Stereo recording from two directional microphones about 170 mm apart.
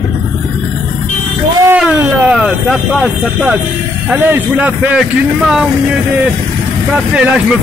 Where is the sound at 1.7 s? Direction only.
5° right (ahead or behind).